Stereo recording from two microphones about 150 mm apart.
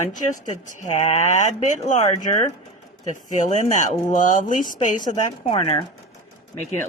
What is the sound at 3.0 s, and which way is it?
Speech, 55° left (ahead or behind).